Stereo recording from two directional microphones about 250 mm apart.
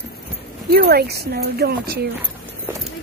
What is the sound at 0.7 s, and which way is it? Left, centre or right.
Speech, right.